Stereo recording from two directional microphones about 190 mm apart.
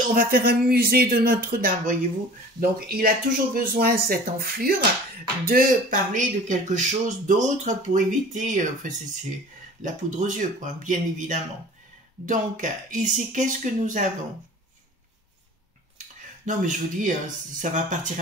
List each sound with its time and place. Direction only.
0.1 s speech: 50° right (ahead or behind)
16.0 s a sound: 40° right (ahead or behind)
17.6 s speech: 40° right (ahead or behind)